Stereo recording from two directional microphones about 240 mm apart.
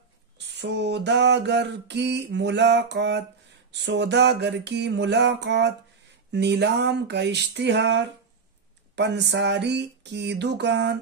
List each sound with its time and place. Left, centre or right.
0.6 s mantra: right